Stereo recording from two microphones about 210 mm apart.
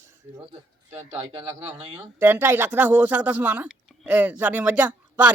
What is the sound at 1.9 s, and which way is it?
Speech, 15° right (ahead or behind).